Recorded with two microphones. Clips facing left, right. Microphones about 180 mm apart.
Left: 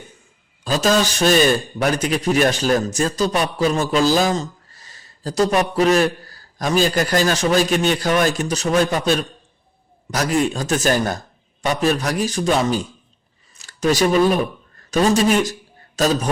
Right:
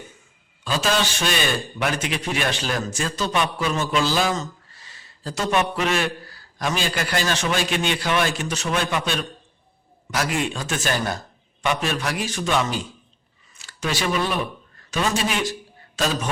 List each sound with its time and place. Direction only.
0.6 s a man's voice: 40° left (ahead or behind)